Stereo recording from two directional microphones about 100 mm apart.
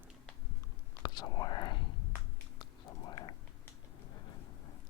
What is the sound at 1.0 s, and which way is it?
Whispering, 40° left (ahead or behind).